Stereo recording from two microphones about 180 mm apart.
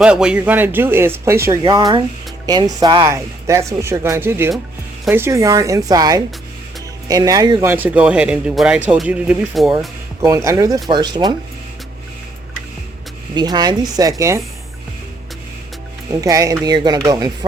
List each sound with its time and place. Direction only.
0.0 s speech: 5° right (ahead or behind)
1.6 s speech: 25° right (ahead or behind); by 9.7 s 5° right (ahead or behind)
10.2 s speech: 20° right (ahead or behind)
13.3 s speech: 20° right (ahead or behind)
16.2 s speech: 20° right (ahead or behind)